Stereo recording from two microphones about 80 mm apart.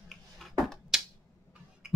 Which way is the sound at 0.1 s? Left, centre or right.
Centre.